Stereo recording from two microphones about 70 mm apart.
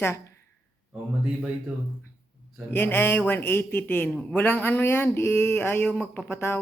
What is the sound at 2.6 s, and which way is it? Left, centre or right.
Speech, left.